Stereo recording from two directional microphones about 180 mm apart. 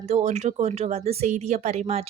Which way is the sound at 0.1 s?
40° right (ahead or behind).